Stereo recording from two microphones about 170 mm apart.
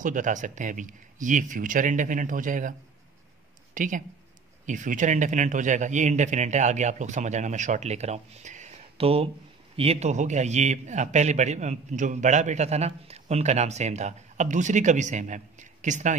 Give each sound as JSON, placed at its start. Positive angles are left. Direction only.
{"t": 0.0, "sound": "a man's voice", "side_deg": -50}
{"t": 3.7, "sound": "a man's voice", "side_deg": -50}